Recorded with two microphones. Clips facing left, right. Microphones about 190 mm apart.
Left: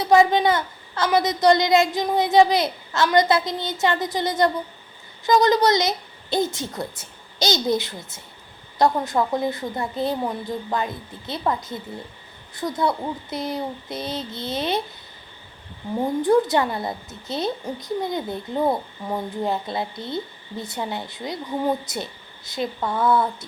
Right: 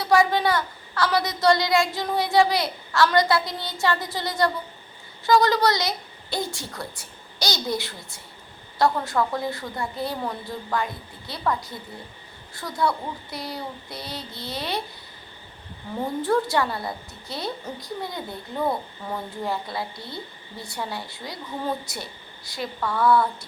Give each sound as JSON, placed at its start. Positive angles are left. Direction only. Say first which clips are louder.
{"t": 0.0, "sound": "a child's voice", "louder": "left 4 dB", "side_deg": 20}
{"t": 16.2, "sound": "a child's voice", "louder": "left 4 dB", "side_deg": 20}